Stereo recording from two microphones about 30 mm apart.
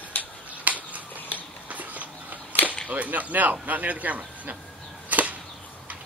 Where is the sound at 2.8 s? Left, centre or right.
Right.